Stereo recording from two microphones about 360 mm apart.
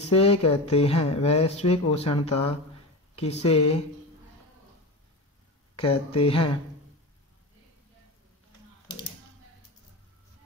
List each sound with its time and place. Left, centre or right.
0.1 s speech: centre
5.8 s speech: centre